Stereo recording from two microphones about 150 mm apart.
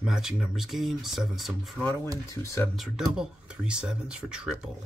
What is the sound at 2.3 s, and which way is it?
Speech, 20° left (ahead or behind).